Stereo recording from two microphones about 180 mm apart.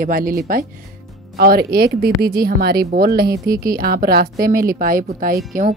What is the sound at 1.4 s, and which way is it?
Speech, 55° right (ahead or behind).